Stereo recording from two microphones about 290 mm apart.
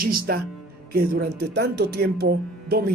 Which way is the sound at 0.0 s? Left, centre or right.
Right.